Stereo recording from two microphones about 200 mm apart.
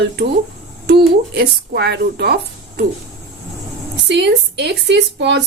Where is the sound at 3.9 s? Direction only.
60° right (ahead or behind).